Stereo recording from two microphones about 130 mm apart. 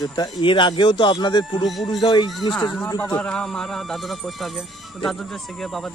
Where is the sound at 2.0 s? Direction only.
35° left (ahead or behind).